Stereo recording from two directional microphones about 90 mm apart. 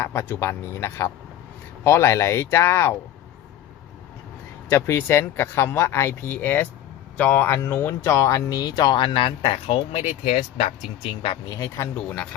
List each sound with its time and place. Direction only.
0.0 s speech: 30° left (ahead or behind)
4.7 s speech: 30° left (ahead or behind); by 8.8 s 45° left (ahead or behind)
8.9 s speech: 70° left (ahead or behind)
11.4 s speech: 50° left (ahead or behind)
11.9 s speech: 15° left (ahead or behind)